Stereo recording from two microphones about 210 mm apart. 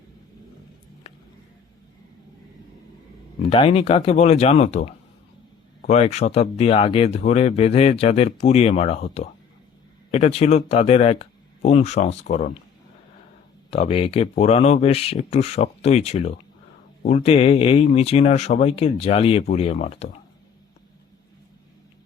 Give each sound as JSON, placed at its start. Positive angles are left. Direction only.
{"t": 3.5, "sound": "speech", "side_deg": 25}
{"t": 13.7, "sound": "speech", "side_deg": 30}